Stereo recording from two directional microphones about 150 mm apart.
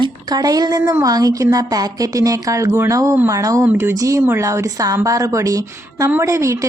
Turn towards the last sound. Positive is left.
turn(degrees=-20)  # may be behind; listen again after turning